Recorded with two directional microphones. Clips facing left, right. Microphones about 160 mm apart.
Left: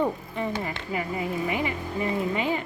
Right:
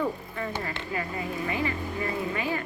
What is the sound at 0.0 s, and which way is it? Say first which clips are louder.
Speech: left 3 dB; 20° left (ahead or behind).